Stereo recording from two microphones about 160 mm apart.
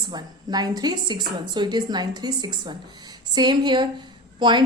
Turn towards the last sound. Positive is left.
turn(degrees=-30)  # may be behind; listen again after turning